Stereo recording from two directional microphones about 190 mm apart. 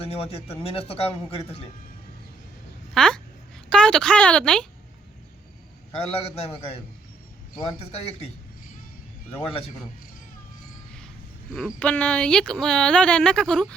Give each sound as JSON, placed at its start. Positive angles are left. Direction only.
{"t": 0.0, "sound": "speech", "side_deg": 30}
{"t": 2.9, "sound": "a sound", "side_deg": 5}
{"t": 3.7, "sound": "speech", "side_deg": 5}
{"t": 5.9, "sound": "speech", "side_deg": 30}
{"t": 9.5, "sound": "speech", "side_deg": 30}
{"t": 11.5, "sound": "speech", "side_deg": 5}